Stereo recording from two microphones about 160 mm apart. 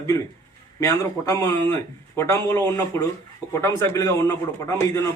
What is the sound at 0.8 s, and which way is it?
A man's voice, 20° left (ahead or behind).